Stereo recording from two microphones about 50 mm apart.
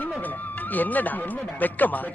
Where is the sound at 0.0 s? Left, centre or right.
Left.